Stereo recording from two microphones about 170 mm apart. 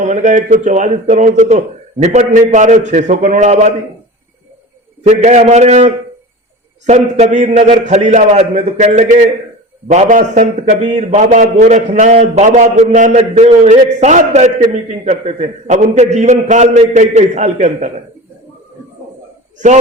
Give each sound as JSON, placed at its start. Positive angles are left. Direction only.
{"t": 0.0, "sound": "a man's voice", "side_deg": -45}
{"t": 5.0, "sound": "a man's voice", "side_deg": -45}